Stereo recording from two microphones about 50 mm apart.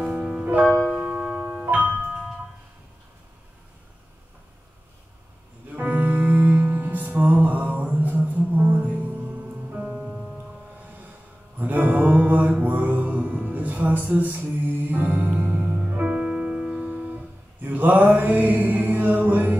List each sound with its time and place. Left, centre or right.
0.1 s music: centre
0.9 s music: right
5.7 s music: right
10.0 s music: centre
11.5 s mantra: right; by 16.9 s centre
16.9 s music: right